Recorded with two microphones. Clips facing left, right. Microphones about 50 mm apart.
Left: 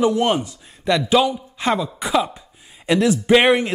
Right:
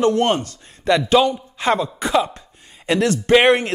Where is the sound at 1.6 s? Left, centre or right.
Centre.